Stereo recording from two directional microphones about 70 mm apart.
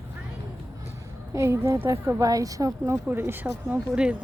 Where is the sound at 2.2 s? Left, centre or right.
Right.